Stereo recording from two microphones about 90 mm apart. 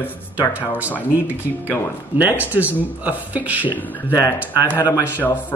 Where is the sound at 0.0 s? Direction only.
25° left (ahead or behind).